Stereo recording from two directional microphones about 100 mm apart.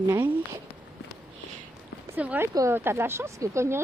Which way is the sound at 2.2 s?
15° right (ahead or behind).